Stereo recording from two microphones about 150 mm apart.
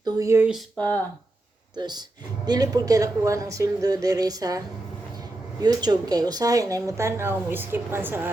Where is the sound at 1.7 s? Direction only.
30° right (ahead or behind).